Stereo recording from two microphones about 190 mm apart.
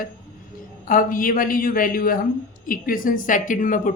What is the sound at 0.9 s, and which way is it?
A woman's voice, 45° left (ahead or behind).